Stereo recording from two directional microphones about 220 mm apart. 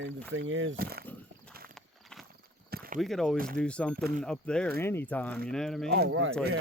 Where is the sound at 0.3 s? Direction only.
60° right (ahead or behind).